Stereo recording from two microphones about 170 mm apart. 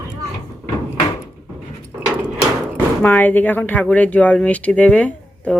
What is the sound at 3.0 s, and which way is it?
Speech, 10° left (ahead or behind).